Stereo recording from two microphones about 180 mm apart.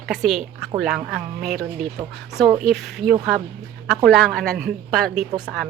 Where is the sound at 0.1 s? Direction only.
Centre (ahead or behind).